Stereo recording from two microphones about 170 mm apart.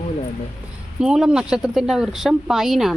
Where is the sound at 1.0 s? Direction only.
5° right (ahead or behind).